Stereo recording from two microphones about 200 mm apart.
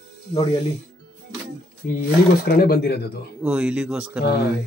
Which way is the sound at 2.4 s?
50° left (ahead or behind).